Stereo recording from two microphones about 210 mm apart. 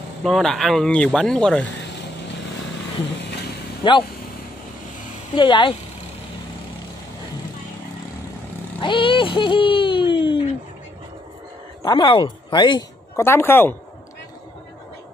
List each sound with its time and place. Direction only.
0.2 s speech: centre (ahead or behind)
3.8 s speech: 20° left (ahead or behind)
5.3 s speech: 25° left (ahead or behind)
8.8 s a sound: 25° left (ahead or behind)
11.8 s speech: 20° left (ahead or behind)